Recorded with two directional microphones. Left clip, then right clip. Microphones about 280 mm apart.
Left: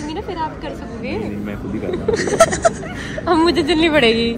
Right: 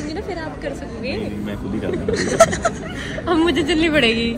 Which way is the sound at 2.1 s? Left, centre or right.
Centre.